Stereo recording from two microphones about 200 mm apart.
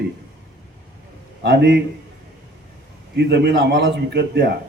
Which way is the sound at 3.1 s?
55° right (ahead or behind).